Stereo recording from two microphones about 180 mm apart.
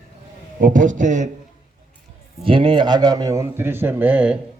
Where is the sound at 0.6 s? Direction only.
45° right (ahead or behind).